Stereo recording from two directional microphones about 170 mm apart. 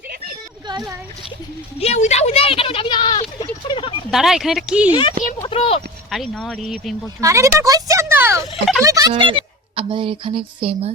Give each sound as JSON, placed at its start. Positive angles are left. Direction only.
{"t": 0.7, "sound": "speech", "side_deg": -25}
{"t": 1.8, "sound": "speech", "side_deg": 40}
{"t": 3.7, "sound": "a sound", "side_deg": 30}
{"t": 4.1, "sound": "speech", "side_deg": 0}
{"t": 4.9, "sound": "speech", "side_deg": 30}
{"t": 6.1, "sound": "speech", "side_deg": 0}
{"t": 7.2, "sound": "speech", "side_deg": -20}